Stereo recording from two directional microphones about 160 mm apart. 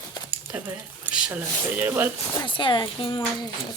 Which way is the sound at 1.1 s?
10° right (ahead or behind).